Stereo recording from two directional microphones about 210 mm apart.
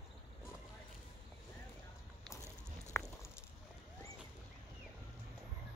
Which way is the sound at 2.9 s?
10° left (ahead or behind).